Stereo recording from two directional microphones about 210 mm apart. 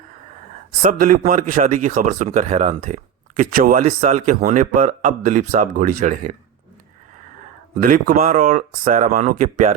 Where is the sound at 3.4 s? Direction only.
45° right (ahead or behind).